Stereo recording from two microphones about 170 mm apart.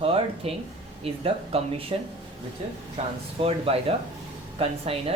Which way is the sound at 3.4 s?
35° right (ahead or behind).